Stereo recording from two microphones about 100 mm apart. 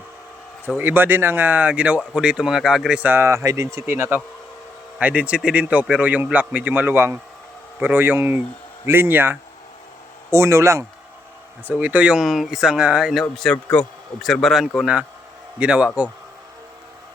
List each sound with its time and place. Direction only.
0.8 s speech: 20° right (ahead or behind)
4.9 s speech: 15° right (ahead or behind); by 10.8 s 30° right (ahead or behind)
11.8 s speech: 15° right (ahead or behind)
13.3 s speech: 5° left (ahead or behind)
14.8 s speech: 10° right (ahead or behind)